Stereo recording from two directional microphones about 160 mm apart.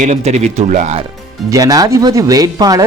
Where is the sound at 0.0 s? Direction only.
45° right (ahead or behind).